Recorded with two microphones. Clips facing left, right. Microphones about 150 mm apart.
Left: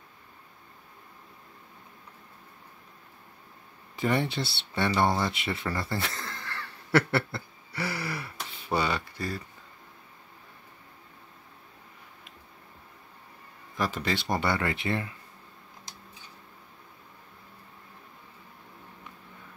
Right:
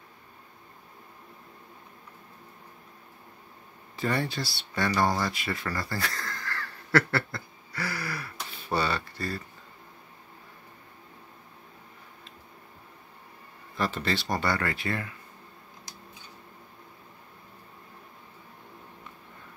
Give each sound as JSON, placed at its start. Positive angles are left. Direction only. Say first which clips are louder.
{"t": 3.9, "sound": "speech", "louder": "left 2 dB", "side_deg": 20}
{"t": 13.7, "sound": "speech", "louder": "even", "side_deg": 10}